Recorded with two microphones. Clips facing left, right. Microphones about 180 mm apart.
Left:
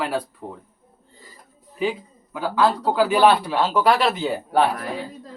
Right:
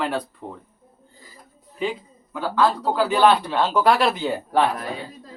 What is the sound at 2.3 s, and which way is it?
Speech, 10° left (ahead or behind).